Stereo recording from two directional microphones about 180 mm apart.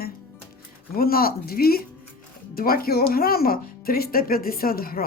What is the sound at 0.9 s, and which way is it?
Speech, 55° left (ahead or behind).